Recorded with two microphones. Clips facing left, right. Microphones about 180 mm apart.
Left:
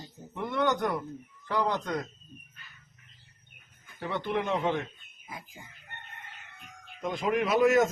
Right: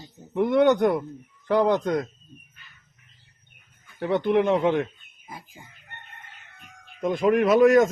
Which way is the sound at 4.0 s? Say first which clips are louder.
Right 10 dB; 50° right (ahead or behind).